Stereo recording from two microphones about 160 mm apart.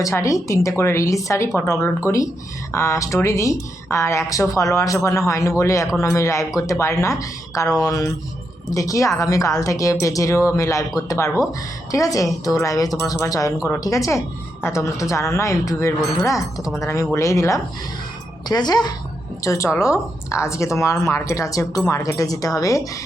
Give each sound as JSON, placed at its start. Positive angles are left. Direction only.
{"t": 0.0, "sound": "speech", "side_deg": 20}